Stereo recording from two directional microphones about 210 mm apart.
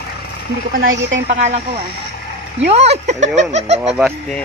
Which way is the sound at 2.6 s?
30° right (ahead or behind).